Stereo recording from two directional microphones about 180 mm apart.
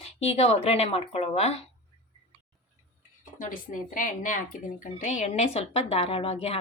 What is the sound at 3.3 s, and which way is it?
Speech, 45° left (ahead or behind).